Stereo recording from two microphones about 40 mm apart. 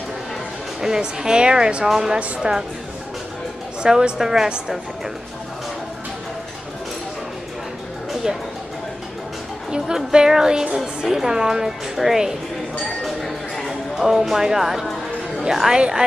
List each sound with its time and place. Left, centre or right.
0.7 s a woman's voice: centre; by 2.5 s right
3.8 s a woman's voice: right
4.2 s a woman's voice: centre
9.7 s a woman's voice: centre
13.0 s a sound: centre
13.9 s a woman's voice: centre